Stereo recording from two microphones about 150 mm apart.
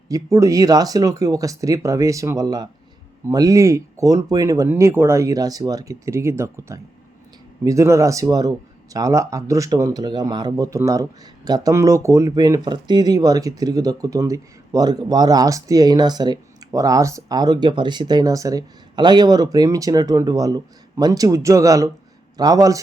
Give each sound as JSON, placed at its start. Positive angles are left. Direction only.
{"t": 0.1, "sound": "speech", "side_deg": -20}